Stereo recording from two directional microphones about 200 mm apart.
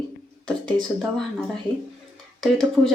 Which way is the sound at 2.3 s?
Centre (ahead or behind).